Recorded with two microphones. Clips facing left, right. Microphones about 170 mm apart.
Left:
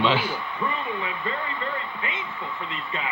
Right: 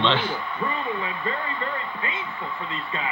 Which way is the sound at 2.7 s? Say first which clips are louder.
Right 1 dB; 35° right (ahead or behind).